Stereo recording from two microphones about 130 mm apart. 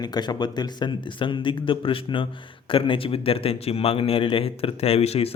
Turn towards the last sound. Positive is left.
turn(degrees=50)  # may be behind; listen again after turning